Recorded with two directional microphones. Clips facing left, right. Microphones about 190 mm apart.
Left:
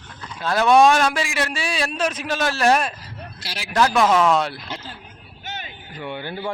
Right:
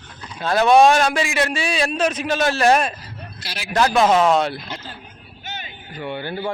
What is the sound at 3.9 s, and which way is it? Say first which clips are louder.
Speech: right 3 dB; 25° right (ahead or behind).